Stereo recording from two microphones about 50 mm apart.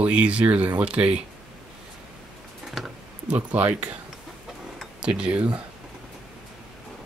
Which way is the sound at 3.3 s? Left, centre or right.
Right.